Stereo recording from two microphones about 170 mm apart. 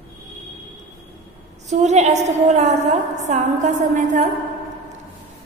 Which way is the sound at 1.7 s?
45° right (ahead or behind).